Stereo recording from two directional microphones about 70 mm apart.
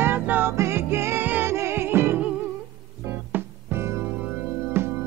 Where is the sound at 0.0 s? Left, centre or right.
Right.